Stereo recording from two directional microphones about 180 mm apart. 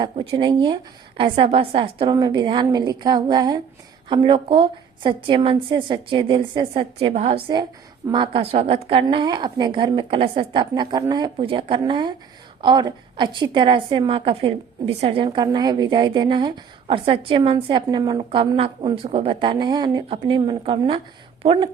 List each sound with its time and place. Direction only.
0.0 s a woman's voice: 25° right (ahead or behind)